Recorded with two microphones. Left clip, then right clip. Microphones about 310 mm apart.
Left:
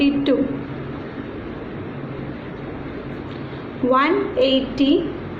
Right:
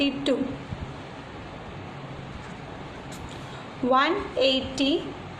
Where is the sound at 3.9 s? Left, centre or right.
Right.